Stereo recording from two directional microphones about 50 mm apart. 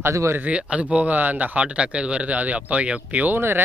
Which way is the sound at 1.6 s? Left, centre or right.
Right.